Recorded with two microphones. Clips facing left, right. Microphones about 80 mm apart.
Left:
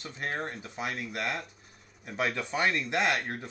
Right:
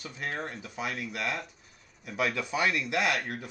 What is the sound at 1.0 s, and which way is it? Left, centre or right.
Speech, centre.